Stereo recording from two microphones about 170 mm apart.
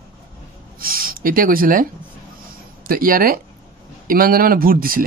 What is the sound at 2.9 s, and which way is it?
Speech, 55° right (ahead or behind).